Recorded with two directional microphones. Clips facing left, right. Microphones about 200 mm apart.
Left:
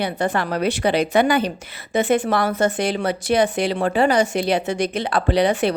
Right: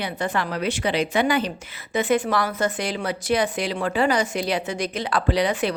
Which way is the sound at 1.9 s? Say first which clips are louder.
Left 3 dB; 25° left (ahead or behind).